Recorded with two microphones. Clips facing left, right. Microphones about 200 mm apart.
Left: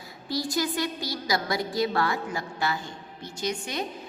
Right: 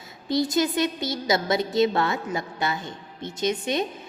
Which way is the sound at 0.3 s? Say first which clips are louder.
Right 5 dB; 20° right (ahead or behind).